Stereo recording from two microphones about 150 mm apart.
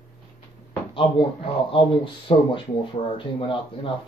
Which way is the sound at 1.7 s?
35° left (ahead or behind).